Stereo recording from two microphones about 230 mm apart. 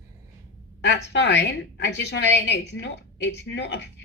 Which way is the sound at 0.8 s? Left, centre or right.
Left.